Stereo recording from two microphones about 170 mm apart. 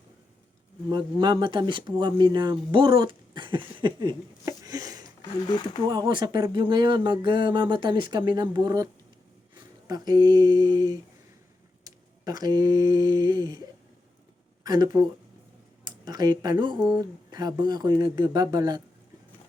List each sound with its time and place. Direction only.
0.9 s speech: 25° right (ahead or behind)
5.5 s speech: 25° left (ahead or behind)
5.9 s speech: 25° right (ahead or behind)
12.2 s speech: 25° right (ahead or behind)
14.6 s speech: 25° right (ahead or behind)
16.0 s speech: 25° right (ahead or behind)